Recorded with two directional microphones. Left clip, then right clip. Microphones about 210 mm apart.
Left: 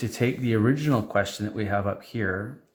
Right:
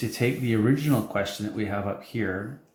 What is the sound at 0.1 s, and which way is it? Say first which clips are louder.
Speech: left 1 dB; 50° left (ahead or behind).